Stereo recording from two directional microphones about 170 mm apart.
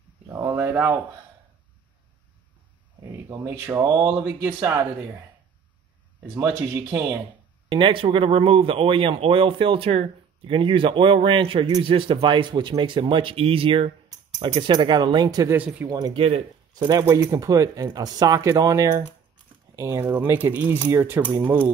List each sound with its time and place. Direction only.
0.3 s a sound: 15° right (ahead or behind)
3.3 s speech: 15° right (ahead or behind)
6.3 s speech: 15° right (ahead or behind)
7.7 s speech: 30° right (ahead or behind)
15.5 s speech: 10° right (ahead or behind)
15.9 s speech: 25° right (ahead or behind)
16.7 s speech: 20° right (ahead or behind)